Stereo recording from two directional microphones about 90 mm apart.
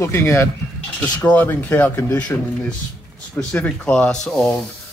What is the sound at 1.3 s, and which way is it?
Speech, 15° left (ahead or behind).